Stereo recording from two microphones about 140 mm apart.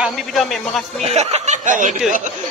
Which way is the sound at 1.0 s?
50° right (ahead or behind).